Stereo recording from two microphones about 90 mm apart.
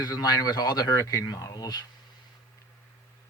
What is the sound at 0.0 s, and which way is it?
Speech, 45° left (ahead or behind).